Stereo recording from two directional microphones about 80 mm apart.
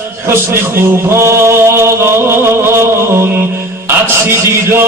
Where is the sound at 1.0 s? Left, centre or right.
Right.